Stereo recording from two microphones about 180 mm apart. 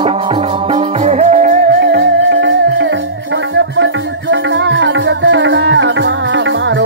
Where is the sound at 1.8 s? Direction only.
75° right (ahead or behind).